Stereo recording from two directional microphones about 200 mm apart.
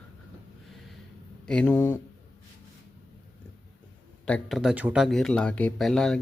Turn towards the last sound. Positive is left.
turn(degrees=0)  # may be behind; listen again after turning